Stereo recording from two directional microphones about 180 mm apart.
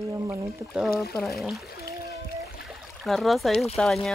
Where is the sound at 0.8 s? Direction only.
55° left (ahead or behind).